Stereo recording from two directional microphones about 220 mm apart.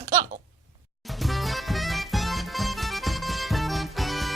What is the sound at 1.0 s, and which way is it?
Music, centre (ahead or behind).